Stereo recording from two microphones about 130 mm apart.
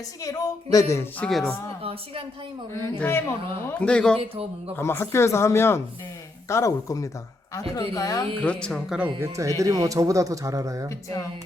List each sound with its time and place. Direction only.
0.2 s speech: 25° left (ahead or behind)
1.2 s a man's voice: 5° left (ahead or behind)
1.8 s speech: 50° right (ahead or behind)
3.0 s speech: 15° left (ahead or behind)
3.8 s speech: 5° left (ahead or behind)
4.2 s speech: 50° right (ahead or behind)
4.8 s speech: 20° left (ahead or behind)
8.4 s speech: 10° left (ahead or behind)
9.2 s speech: 25° right (ahead or behind)
10.8 s speech: 25° left (ahead or behind)